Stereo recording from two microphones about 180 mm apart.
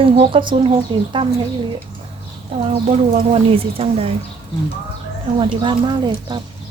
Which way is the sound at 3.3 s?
30° right (ahead or behind).